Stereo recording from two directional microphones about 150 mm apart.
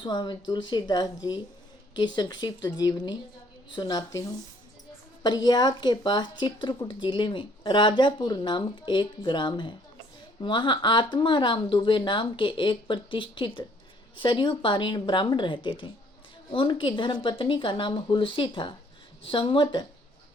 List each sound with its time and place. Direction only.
0.0 s speech: 30° left (ahead or behind)
5.2 s speech: 30° left (ahead or behind)